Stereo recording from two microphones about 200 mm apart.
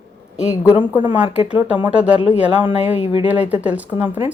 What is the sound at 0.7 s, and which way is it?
A woman's voice, 10° right (ahead or behind).